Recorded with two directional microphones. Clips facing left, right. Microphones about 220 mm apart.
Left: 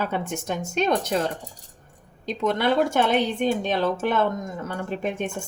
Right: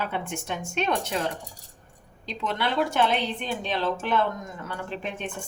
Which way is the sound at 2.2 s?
45° left (ahead or behind).